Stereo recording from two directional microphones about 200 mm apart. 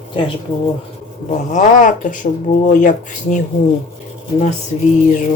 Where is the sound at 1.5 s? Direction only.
40° left (ahead or behind).